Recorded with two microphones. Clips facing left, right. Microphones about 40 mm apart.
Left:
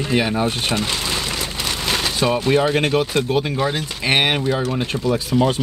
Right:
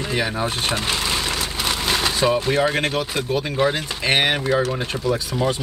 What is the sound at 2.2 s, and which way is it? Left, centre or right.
Speech, centre.